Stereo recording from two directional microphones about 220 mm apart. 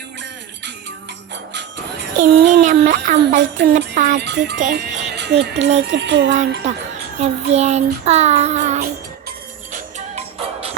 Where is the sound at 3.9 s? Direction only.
35° right (ahead or behind).